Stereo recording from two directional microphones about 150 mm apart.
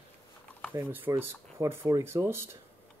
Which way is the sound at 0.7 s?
15° right (ahead or behind).